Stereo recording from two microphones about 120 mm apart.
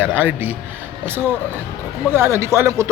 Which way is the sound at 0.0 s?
15° right (ahead or behind).